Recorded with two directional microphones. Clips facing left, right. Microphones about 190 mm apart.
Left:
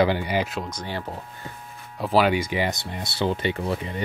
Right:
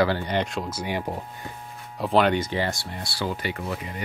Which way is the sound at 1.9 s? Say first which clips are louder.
Even; centre (ahead or behind).